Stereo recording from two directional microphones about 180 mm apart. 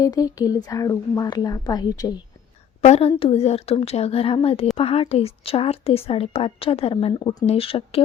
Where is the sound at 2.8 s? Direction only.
35° left (ahead or behind).